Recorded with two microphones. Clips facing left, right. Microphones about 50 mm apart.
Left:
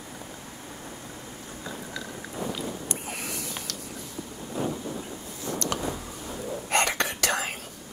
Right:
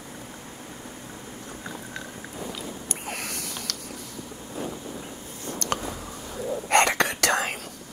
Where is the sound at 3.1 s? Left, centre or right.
Right.